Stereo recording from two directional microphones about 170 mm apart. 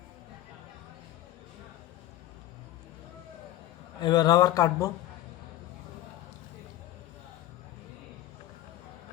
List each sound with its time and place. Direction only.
4.0 s speech: 25° left (ahead or behind)